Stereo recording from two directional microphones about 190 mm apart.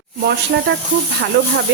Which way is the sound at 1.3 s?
60° right (ahead or behind).